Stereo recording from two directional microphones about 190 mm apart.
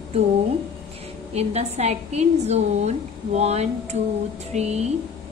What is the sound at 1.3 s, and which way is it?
Speech, 35° right (ahead or behind).